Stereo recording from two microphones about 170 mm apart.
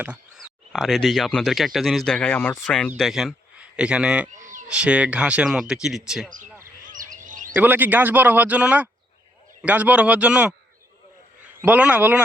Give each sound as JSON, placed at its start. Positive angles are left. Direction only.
{"t": 0.3, "sound": "a man's voice", "side_deg": 0}
{"t": 4.4, "sound": "a sound", "side_deg": -50}
{"t": 4.7, "sound": "speech", "side_deg": -5}
{"t": 6.8, "sound": "bird", "side_deg": -50}
{"t": 7.5, "sound": "speech", "side_deg": -10}
{"t": 11.6, "sound": "speech", "side_deg": -10}